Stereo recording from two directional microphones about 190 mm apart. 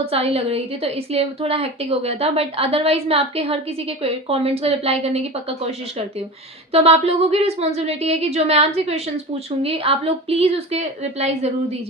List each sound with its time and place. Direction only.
0.0 s a woman's voice: 30° right (ahead or behind)
6.7 s a woman's voice: 30° right (ahead or behind)